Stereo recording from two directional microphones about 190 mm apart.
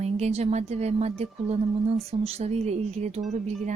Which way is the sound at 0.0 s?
35° right (ahead or behind).